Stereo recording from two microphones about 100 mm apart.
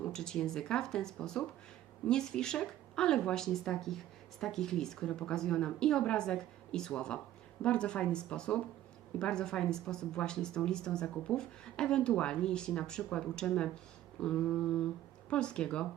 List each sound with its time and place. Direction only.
0.0 s speech: 5° left (ahead or behind)